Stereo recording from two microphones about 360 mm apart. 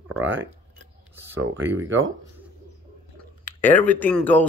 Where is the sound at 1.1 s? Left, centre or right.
Centre.